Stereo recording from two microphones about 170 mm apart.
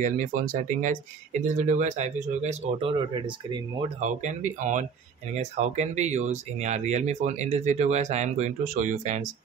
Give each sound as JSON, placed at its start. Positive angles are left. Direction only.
{"t": 0.0, "sound": "speech", "side_deg": -50}
{"t": 4.0, "sound": "speech", "side_deg": -45}